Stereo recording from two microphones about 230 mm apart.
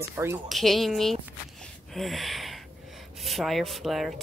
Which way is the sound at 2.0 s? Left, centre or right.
Centre.